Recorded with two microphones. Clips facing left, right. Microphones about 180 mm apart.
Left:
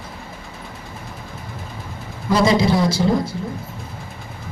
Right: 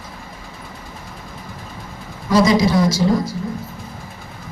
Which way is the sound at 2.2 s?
25° left (ahead or behind).